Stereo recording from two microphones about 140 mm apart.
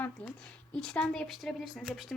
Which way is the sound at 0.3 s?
5° left (ahead or behind).